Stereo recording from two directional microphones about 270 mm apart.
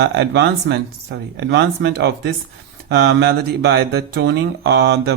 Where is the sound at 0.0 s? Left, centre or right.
Right.